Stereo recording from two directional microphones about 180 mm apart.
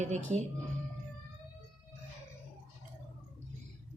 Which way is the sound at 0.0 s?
40° right (ahead or behind).